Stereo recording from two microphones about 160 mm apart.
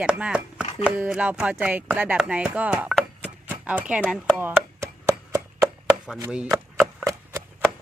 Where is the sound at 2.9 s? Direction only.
5° right (ahead or behind).